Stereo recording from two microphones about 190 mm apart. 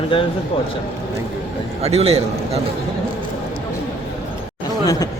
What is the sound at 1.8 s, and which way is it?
Speech, 35° right (ahead or behind).